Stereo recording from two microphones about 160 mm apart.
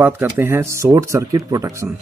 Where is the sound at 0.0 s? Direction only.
15° right (ahead or behind).